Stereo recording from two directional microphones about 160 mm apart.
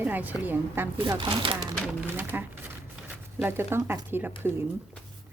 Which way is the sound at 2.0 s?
10° right (ahead or behind).